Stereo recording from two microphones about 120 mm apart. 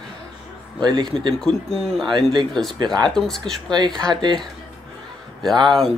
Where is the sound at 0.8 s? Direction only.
35° right (ahead or behind).